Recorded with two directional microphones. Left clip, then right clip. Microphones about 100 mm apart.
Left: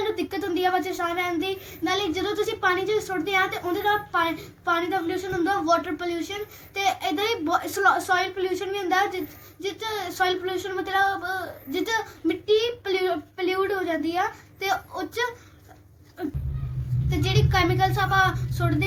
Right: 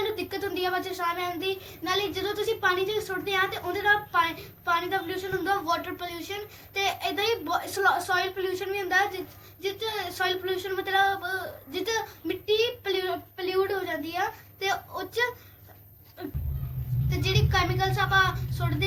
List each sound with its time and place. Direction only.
0.3 s a woman's voice: 20° right (ahead or behind)
17.1 s a woman's voice: 20° right (ahead or behind)